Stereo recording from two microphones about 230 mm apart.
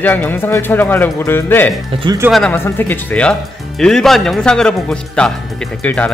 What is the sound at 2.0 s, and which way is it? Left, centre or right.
Speech, centre.